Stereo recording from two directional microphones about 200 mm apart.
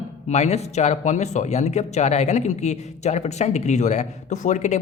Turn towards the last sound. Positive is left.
turn(degrees=35)  # may be behind; listen again after turning